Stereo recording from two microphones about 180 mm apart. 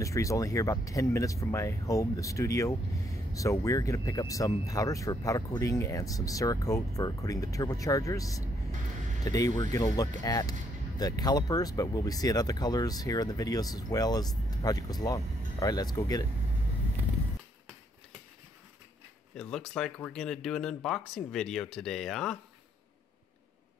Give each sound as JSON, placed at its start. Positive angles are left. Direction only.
{"t": 0.0, "sound": "speech", "side_deg": 15}
{"t": 19.3, "sound": "speech", "side_deg": 5}